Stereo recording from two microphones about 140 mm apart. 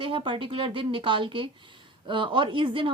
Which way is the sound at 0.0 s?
35° right (ahead or behind).